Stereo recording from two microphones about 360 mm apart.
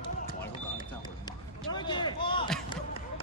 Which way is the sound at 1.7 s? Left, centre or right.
Centre.